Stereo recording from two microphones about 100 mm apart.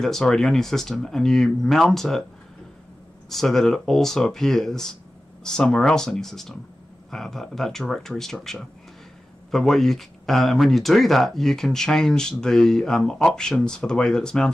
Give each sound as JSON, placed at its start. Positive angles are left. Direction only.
{"t": 0.0, "sound": "speech", "side_deg": 5}
{"t": 3.3, "sound": "speech", "side_deg": 5}